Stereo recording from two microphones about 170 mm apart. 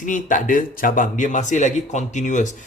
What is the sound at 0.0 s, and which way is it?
Speech, 50° left (ahead or behind).